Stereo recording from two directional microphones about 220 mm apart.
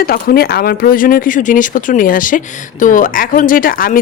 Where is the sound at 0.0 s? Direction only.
45° left (ahead or behind).